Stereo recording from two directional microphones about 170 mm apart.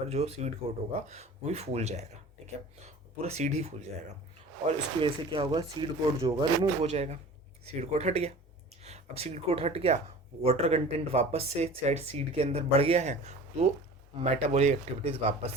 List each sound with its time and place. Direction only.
0.1 s speech: 35° right (ahead or behind)